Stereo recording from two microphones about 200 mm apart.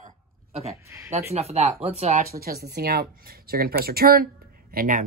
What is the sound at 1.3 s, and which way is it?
Speech, 30° right (ahead or behind).